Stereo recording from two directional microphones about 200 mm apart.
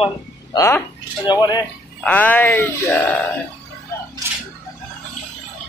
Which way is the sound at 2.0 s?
5° left (ahead or behind).